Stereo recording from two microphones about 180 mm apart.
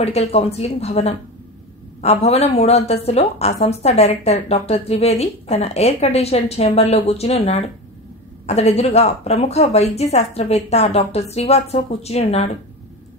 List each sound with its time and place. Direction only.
0.0 s a woman's voice: 35° left (ahead or behind)